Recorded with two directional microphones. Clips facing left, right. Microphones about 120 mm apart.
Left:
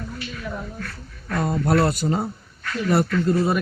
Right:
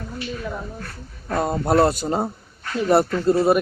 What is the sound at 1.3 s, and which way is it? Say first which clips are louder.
A woman's voice: right 1 dB; 30° right (ahead or behind).